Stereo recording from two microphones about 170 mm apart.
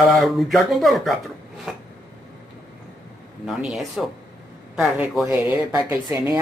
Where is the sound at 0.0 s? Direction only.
Centre (ahead or behind).